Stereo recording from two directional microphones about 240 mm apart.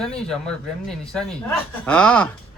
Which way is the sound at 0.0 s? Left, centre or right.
Centre.